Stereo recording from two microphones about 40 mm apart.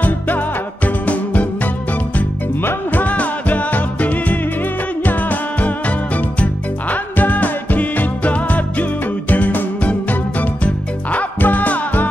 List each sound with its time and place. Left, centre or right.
0.8 s music: left
2.6 s music: left
3.1 s music: left